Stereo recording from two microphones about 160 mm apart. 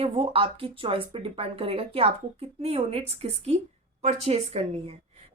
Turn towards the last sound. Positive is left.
turn(degrees=-40)  # may be behind; listen again after turning